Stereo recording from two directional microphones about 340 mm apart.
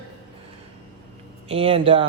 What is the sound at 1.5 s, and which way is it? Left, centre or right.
Speech, centre.